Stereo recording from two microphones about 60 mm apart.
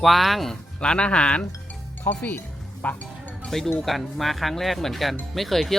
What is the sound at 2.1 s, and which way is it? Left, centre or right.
Speech, left.